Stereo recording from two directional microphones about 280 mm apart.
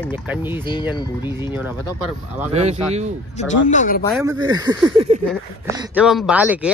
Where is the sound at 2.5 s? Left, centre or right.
Right.